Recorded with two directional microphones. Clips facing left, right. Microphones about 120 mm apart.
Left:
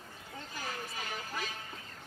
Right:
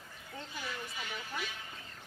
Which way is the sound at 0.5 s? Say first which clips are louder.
Left 2 dB; 40° left (ahead or behind).